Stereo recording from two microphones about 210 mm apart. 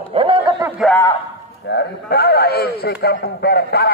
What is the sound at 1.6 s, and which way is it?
A man's voice, 55° left (ahead or behind).